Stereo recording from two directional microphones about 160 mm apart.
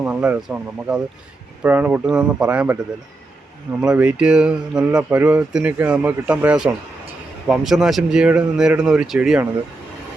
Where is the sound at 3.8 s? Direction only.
10° right (ahead or behind).